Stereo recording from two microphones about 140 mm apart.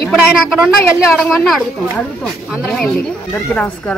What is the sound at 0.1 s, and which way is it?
Speech, centre (ahead or behind).